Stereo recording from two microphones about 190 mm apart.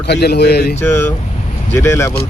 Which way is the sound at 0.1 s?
60° left (ahead or behind).